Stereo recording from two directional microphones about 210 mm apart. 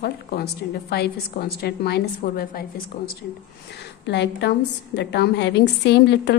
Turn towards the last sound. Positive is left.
turn(degrees=55)  # may be behind; listen again after turning